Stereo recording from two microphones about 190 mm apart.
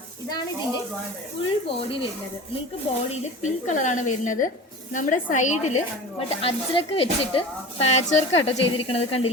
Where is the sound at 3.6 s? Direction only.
40° left (ahead or behind).